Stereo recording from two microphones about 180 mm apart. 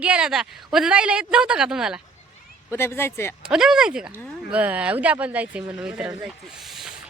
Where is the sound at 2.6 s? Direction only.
15° left (ahead or behind).